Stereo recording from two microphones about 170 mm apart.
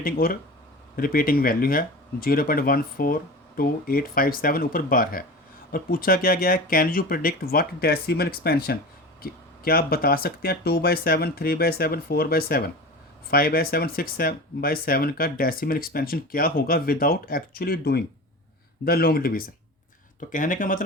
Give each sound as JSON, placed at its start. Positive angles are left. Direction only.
{"t": 0.0, "sound": "speech", "side_deg": 60}